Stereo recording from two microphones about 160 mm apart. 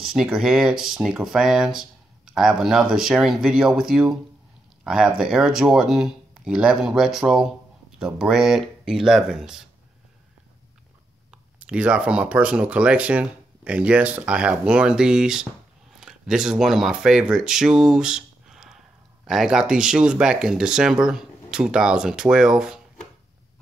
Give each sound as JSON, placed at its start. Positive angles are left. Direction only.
{"t": 0.0, "sound": "speech", "side_deg": -5}
{"t": 11.6, "sound": "speech", "side_deg": -5}